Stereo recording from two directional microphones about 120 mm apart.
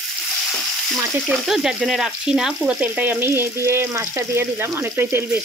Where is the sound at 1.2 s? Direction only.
5° right (ahead or behind); by 5.2 s 20° right (ahead or behind).